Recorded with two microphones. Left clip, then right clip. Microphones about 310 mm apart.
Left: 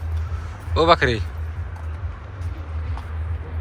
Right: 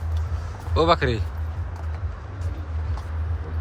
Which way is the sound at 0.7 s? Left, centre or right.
Centre.